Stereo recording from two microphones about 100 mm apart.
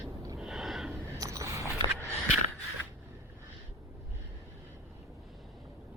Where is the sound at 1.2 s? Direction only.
35° right (ahead or behind).